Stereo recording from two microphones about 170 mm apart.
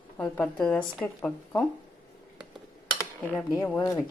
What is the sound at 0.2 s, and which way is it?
Speech, 5° left (ahead or behind).